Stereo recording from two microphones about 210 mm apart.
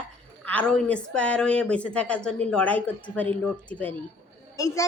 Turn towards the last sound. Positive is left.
turn(degrees=15)  # may be behind; listen again after turning